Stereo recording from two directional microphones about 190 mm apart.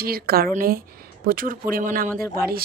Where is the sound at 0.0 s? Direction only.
50° right (ahead or behind).